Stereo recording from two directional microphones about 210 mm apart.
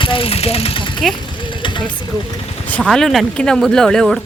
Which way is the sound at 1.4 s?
20° left (ahead or behind).